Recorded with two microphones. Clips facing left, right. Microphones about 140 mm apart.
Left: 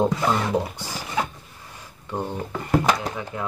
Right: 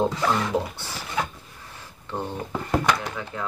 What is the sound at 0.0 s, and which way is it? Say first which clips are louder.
Speech: left 2 dB; 15° left (ahead or behind).